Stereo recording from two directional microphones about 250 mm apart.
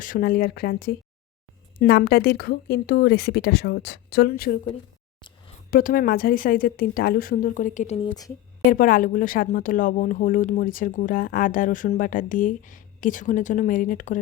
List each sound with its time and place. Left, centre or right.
0.0 s a woman's voice: left
5.7 s a woman's voice: left; by 8.3 s centre
8.7 s a woman's voice: left